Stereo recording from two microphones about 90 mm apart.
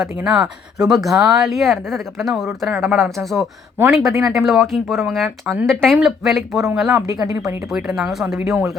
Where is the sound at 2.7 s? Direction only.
25° right (ahead or behind).